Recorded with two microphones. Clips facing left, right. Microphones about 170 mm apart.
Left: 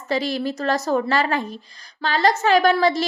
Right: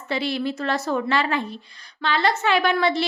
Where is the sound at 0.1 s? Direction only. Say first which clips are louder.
Left 2 dB; 40° left (ahead or behind).